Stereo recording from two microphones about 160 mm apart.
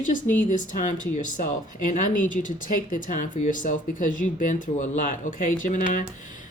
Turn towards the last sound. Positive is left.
turn(degrees=55)  # may be behind; listen again after turning